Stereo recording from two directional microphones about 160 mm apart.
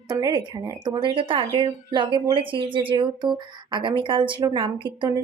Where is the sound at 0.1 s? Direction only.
25° right (ahead or behind).